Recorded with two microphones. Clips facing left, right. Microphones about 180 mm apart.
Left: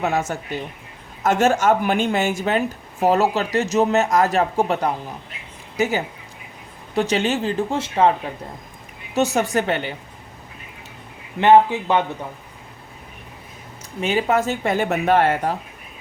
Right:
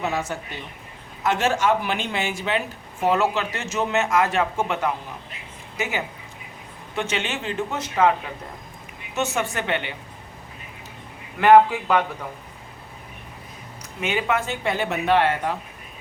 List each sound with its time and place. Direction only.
0.0 s speech: 45° left (ahead or behind)
11.3 s a man's voice: 20° left (ahead or behind)
14.0 s speech: 35° left (ahead or behind)